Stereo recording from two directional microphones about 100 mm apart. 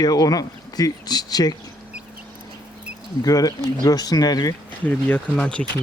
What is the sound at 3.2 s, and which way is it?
Speech, 40° left (ahead or behind).